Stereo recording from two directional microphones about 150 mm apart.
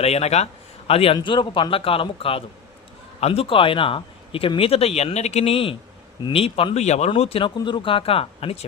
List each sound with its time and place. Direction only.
0.0 s speech: 45° left (ahead or behind)